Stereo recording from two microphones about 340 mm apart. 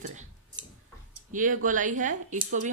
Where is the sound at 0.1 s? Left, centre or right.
Right.